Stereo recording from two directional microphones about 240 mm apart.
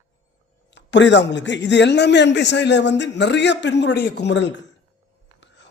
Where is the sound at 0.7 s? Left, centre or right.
Left.